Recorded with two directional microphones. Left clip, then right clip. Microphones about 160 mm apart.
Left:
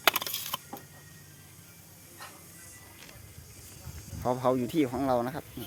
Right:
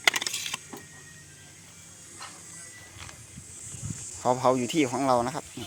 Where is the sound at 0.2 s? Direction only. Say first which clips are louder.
Right 4 dB; 20° left (ahead or behind).